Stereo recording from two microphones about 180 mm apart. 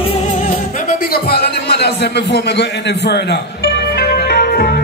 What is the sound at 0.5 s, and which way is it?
Music, 55° left (ahead or behind).